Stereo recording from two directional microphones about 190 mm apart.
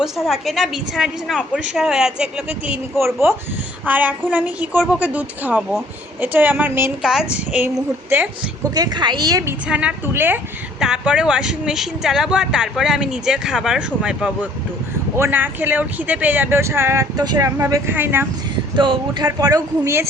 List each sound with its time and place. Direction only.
0.0 s a woman's voice: centre (ahead or behind); by 9.6 s 20° right (ahead or behind)
9.6 s a woman's voice: 5° right (ahead or behind)
18.8 s speech: 25° right (ahead or behind)